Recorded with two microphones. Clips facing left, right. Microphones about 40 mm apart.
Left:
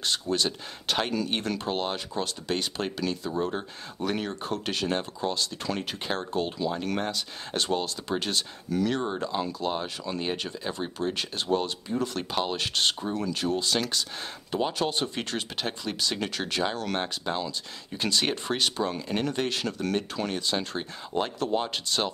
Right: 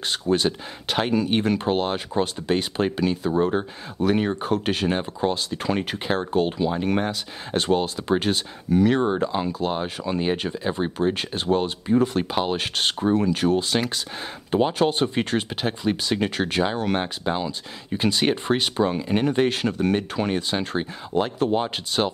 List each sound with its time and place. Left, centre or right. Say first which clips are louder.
0.0 s speech: right 5 dB; right
4.0 s speech: right 8 dB; centre